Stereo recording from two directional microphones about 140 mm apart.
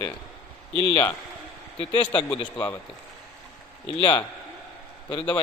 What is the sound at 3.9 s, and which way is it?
Speech, 35° left (ahead or behind).